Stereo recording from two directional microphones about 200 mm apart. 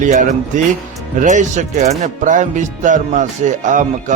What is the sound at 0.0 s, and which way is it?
Speech, 40° right (ahead or behind).